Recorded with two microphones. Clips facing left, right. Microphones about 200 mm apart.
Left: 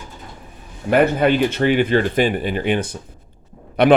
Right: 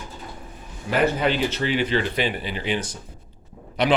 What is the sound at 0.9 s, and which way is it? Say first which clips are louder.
A man's voice: left 6 dB; 55° left (ahead or behind).